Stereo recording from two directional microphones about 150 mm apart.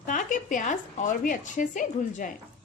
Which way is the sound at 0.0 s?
60° left (ahead or behind).